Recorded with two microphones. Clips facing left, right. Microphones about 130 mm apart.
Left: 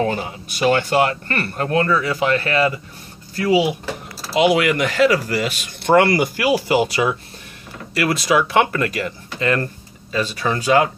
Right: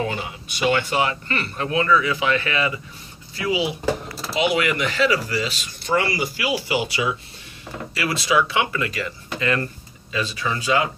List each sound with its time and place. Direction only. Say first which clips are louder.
0.0 s a man's voice: left 5 dB; 45° left (ahead or behind)